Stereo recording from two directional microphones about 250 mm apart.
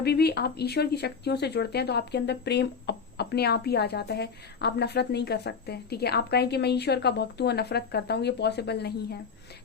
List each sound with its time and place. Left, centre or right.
0.0 s speech: left